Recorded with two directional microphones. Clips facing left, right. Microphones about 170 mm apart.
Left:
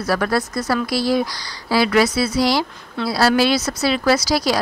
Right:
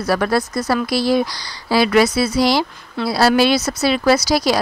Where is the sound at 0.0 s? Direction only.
25° right (ahead or behind).